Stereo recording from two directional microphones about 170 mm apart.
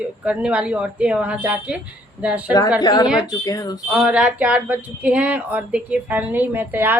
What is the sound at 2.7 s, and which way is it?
Speech, 25° left (ahead or behind).